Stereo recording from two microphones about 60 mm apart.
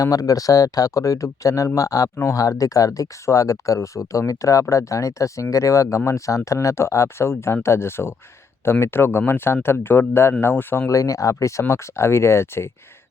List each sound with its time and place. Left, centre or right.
0.0 s speech: left
10.8 s speech: left
11.6 s speech: left